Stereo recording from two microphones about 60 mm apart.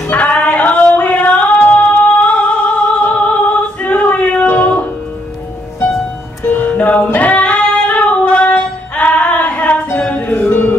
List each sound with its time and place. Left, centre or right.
0.1 s music: left
6.4 s female singing: left
9.9 s music: left